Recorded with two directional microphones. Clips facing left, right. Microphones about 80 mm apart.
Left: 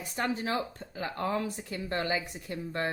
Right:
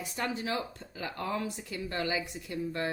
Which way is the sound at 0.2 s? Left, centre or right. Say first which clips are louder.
Left 3 dB; left.